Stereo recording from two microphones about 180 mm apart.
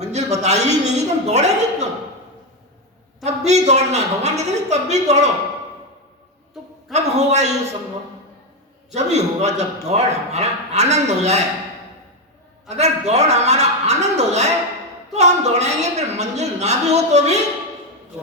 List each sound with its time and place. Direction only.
0.0 s a woman's voice: 40° right (ahead or behind)
3.2 s a man's voice: 40° right (ahead or behind)
6.5 s music: centre (ahead or behind)
6.9 s a man's voice: 40° right (ahead or behind)
8.9 s a man's voice: 40° right (ahead or behind)
12.6 s a man's voice: 40° right (ahead or behind)